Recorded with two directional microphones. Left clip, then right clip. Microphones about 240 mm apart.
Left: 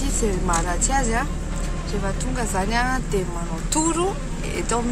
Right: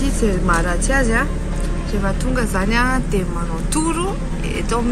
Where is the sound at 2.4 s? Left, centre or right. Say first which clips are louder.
Right 4 dB; centre.